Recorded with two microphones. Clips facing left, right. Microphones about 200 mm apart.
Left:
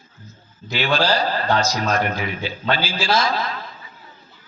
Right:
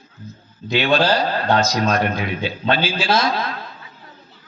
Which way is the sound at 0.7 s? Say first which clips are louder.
Right 3 dB; 20° right (ahead or behind).